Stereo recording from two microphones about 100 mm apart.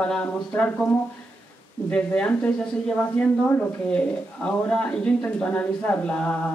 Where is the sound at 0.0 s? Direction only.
10° left (ahead or behind).